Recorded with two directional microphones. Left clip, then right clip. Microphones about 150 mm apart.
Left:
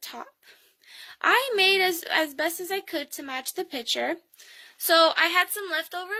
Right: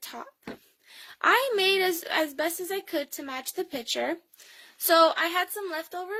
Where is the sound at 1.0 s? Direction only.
40° right (ahead or behind).